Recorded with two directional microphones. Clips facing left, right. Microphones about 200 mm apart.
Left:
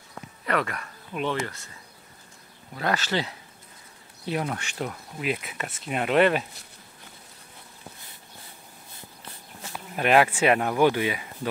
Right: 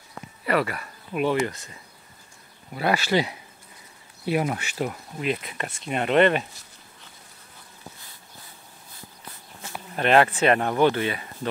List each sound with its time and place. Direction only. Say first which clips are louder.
0.5 s speech: right 3 dB; 5° right (ahead or behind)
2.7 s speech: right 4 dB; 10° right (ahead or behind)
5.2 s speech: right 2 dB; 5° left (ahead or behind)
9.9 s speech: right 1 dB; 10° left (ahead or behind)